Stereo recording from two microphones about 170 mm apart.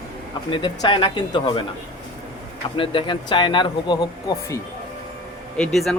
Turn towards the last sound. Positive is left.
turn(degrees=5)  # may be behind; listen again after turning